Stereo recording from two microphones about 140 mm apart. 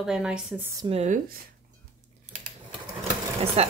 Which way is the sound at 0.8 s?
45° right (ahead or behind).